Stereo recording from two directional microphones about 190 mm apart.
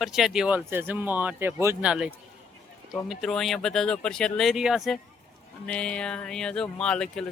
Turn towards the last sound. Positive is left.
turn(degrees=5)  # may be behind; listen again after turning